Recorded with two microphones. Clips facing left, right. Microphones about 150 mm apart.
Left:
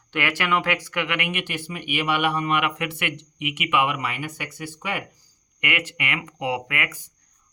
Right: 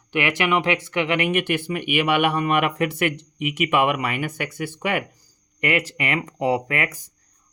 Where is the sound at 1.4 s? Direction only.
55° right (ahead or behind).